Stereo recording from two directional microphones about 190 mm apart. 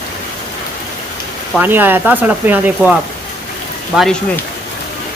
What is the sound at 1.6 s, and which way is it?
Speech, 10° right (ahead or behind).